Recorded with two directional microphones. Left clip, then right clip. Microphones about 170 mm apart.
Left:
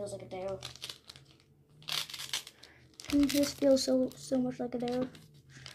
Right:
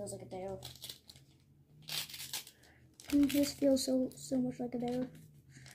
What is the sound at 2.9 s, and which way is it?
Speech, 20° left (ahead or behind).